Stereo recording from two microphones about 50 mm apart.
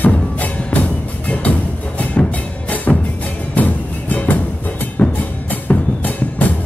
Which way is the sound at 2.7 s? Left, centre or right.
Left.